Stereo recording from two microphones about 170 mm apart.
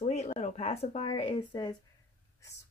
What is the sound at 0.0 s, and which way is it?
Speech, 40° left (ahead or behind).